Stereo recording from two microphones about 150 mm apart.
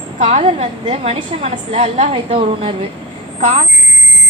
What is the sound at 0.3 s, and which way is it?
A woman's voice, 45° right (ahead or behind).